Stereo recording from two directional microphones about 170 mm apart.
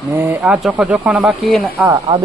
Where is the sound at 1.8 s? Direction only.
20° right (ahead or behind).